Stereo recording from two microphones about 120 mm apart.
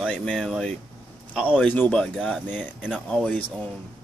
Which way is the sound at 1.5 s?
15° left (ahead or behind).